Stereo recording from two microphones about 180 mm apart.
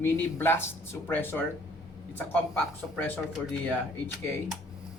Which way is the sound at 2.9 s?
5° left (ahead or behind).